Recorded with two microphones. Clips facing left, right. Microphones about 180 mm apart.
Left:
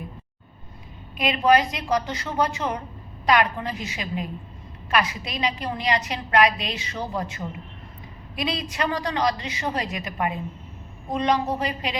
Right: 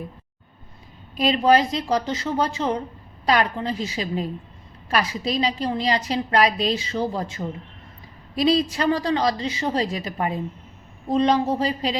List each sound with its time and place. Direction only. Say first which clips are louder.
1.1 s a woman's voice: right 2 dB; 35° right (ahead or behind)